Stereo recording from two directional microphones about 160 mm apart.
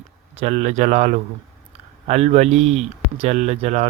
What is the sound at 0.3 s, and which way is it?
Speech, 45° right (ahead or behind).